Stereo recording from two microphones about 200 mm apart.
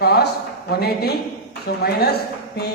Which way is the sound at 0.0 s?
55° left (ahead or behind).